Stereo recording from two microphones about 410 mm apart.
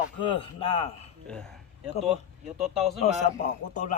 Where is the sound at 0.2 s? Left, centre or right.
Centre.